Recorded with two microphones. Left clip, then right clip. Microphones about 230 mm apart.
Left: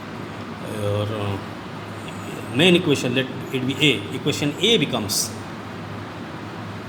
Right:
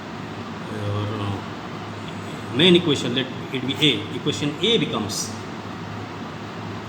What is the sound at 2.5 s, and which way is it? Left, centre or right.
Speech, left.